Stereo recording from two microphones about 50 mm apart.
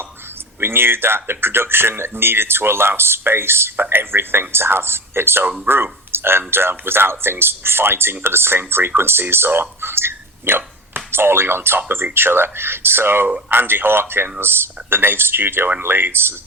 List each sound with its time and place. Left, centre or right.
0.6 s speech: right